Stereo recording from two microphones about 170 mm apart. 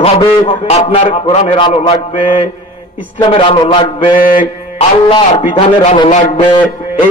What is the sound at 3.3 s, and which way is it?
A man's voice, 30° left (ahead or behind).